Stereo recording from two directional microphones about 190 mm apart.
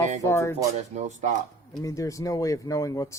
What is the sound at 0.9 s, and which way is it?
Speech, 40° right (ahead or behind).